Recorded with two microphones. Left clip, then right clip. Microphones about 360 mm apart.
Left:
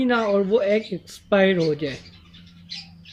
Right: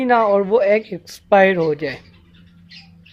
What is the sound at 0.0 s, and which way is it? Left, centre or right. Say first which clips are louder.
Speech: right 6 dB; centre.